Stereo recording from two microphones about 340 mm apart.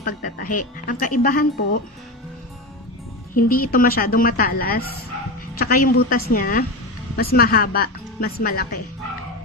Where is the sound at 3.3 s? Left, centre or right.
Left.